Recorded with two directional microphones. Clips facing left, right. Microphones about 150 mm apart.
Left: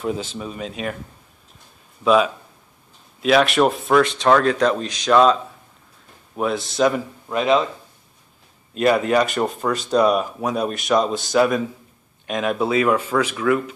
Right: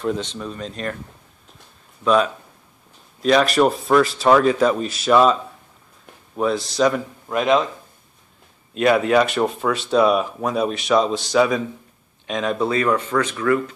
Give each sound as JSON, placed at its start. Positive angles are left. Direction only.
{"t": 0.0, "sound": "speech", "side_deg": 5}
{"t": 2.0, "sound": "speech", "side_deg": 5}
{"t": 8.7, "sound": "speech", "side_deg": 0}